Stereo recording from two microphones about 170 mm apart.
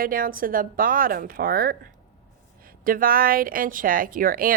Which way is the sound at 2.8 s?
55° right (ahead or behind).